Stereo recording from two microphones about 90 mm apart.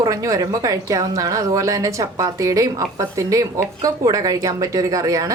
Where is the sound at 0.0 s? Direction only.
40° right (ahead or behind).